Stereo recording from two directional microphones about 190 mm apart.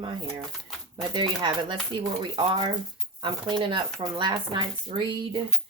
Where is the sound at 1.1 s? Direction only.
25° right (ahead or behind).